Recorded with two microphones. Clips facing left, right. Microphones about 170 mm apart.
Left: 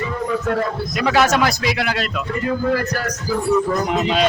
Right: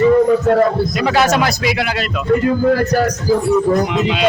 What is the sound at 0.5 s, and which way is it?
Speech, 35° right (ahead or behind).